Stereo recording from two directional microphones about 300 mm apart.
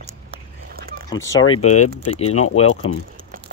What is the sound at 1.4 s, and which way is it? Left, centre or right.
Speech, left.